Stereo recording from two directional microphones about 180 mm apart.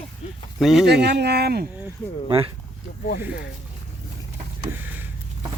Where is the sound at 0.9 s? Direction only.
65° right (ahead or behind).